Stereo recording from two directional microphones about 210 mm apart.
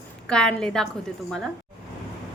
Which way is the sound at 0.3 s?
5° left (ahead or behind).